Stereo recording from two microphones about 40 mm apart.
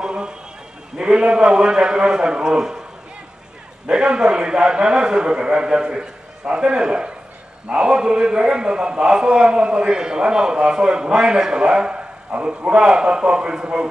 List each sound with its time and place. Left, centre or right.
0.0 s a sound: right
0.9 s a man's voice: right
3.8 s a man's voice: right